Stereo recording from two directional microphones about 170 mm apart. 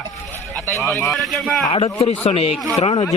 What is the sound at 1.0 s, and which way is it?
Speech, centre (ahead or behind).